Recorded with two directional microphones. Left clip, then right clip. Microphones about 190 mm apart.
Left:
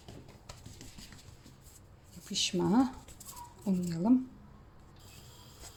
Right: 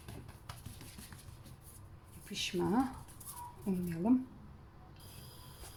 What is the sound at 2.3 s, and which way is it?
Speech, 30° left (ahead or behind).